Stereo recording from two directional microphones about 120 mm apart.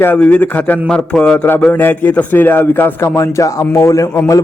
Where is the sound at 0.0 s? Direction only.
15° left (ahead or behind).